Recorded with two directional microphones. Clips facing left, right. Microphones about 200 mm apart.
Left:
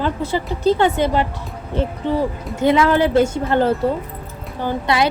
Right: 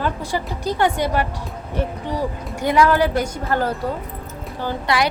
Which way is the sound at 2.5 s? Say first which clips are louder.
Left 2 dB; 25° left (ahead or behind).